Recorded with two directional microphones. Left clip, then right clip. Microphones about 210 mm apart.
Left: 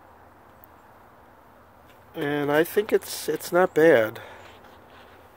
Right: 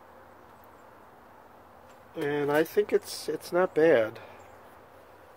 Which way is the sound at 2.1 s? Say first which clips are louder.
Left 3 dB; 45° left (ahead or behind).